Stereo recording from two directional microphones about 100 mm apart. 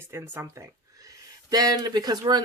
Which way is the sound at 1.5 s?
40° right (ahead or behind).